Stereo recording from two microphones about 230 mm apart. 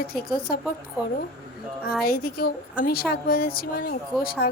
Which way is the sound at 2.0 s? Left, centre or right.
Left.